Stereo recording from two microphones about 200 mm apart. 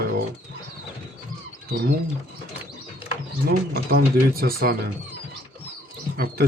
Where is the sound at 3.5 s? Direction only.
50° right (ahead or behind).